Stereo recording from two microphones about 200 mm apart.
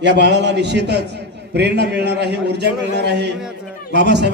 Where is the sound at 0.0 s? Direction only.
60° right (ahead or behind).